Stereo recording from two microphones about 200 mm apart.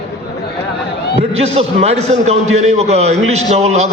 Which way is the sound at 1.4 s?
30° right (ahead or behind).